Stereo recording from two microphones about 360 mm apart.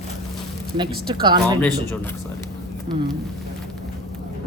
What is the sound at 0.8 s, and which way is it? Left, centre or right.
Speech, centre.